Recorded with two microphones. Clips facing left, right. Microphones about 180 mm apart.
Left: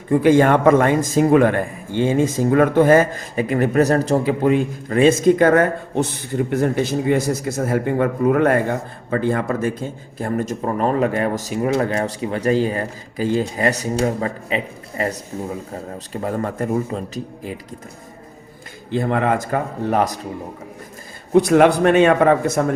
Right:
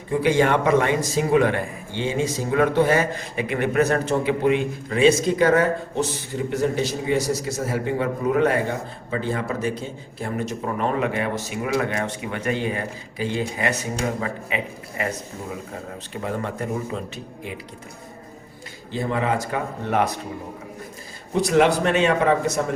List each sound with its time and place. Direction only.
0.1 s a man's voice: 50° left (ahead or behind)
16.2 s speech: 40° left (ahead or behind)
18.9 s a man's voice: 60° left (ahead or behind); by 20.2 s 35° left (ahead or behind)
21.3 s a man's voice: 55° left (ahead or behind)